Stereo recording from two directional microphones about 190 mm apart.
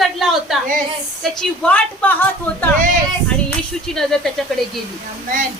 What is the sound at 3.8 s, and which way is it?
Speech, 5° left (ahead or behind).